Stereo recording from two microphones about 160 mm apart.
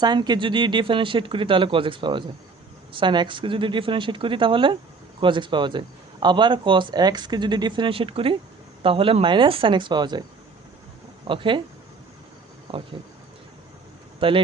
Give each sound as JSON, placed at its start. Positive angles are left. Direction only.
{"t": 0.0, "sound": "speech", "side_deg": -25}
{"t": 11.3, "sound": "speech", "side_deg": -30}
{"t": 12.7, "sound": "speech", "side_deg": -35}
{"t": 14.2, "sound": "speech", "side_deg": -35}